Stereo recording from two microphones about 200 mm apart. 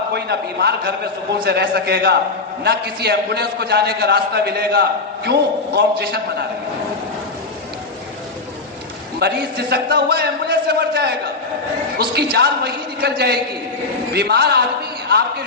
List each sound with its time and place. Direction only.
0.1 s a man's voice: 55° right (ahead or behind)
9.1 s a man's voice: 55° right (ahead or behind)